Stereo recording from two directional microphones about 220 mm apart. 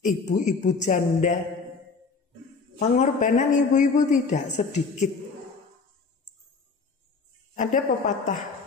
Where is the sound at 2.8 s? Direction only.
30° left (ahead or behind).